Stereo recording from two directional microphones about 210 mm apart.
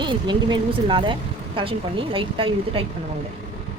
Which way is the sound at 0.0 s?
20° right (ahead or behind).